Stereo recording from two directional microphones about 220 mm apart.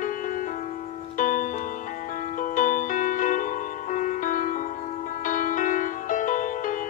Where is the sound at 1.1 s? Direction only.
35° left (ahead or behind).